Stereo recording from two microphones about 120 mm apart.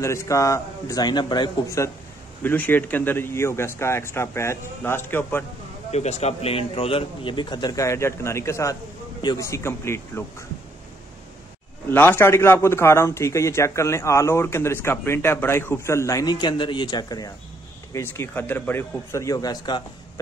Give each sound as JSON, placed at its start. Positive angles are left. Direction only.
{"t": 0.0, "sound": "a man's voice", "side_deg": 25}
{"t": 1.8, "sound": "a man's voice", "side_deg": 25}
{"t": 5.9, "sound": "a man's voice", "side_deg": 60}
{"t": 11.9, "sound": "a man's voice", "side_deg": 15}
{"t": 17.9, "sound": "a man's voice", "side_deg": 20}